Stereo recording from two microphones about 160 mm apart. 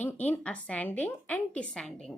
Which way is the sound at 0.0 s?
10° left (ahead or behind).